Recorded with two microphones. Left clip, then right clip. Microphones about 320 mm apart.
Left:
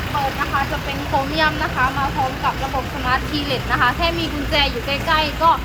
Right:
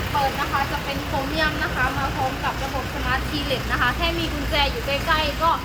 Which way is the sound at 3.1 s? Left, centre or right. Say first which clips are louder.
Left 4 dB; centre.